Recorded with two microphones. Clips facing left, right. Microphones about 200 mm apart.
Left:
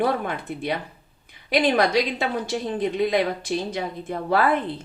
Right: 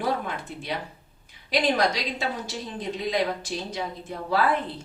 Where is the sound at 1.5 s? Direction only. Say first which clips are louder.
Left 4 dB; 55° left (ahead or behind).